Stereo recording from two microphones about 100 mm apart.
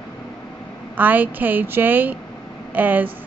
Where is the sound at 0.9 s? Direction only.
15° right (ahead or behind).